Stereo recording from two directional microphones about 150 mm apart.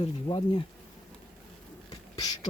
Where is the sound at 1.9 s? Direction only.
25° left (ahead or behind).